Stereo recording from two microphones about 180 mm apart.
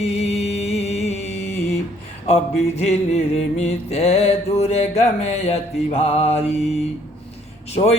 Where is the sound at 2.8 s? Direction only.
35° left (ahead or behind).